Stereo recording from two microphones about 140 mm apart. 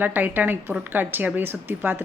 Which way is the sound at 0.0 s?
15° right (ahead or behind).